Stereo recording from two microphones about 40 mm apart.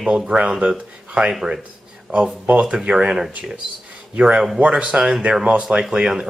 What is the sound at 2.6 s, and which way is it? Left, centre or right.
Speech, right.